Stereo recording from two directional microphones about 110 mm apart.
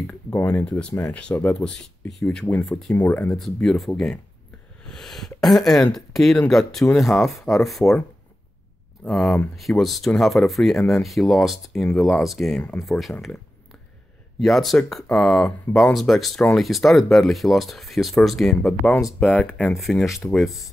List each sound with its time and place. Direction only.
0.3 s speech: 15° left (ahead or behind)
3.3 s speech: centre (ahead or behind)
9.0 s speech: centre (ahead or behind)
14.4 s speech: centre (ahead or behind)
19.1 s speech: 15° left (ahead or behind)
19.8 s speech: centre (ahead or behind)